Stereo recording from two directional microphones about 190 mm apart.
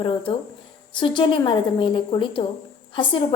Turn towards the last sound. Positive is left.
turn(degrees=25)  # may be behind; listen again after turning